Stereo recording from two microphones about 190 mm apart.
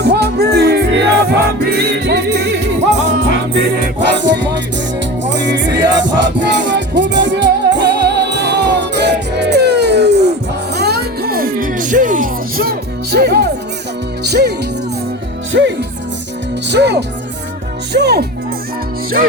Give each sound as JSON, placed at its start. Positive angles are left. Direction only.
{"t": 0.0, "sound": "music", "side_deg": -60}
{"t": 15.5, "sound": "music", "side_deg": -65}
{"t": 16.6, "sound": "speech", "side_deg": -65}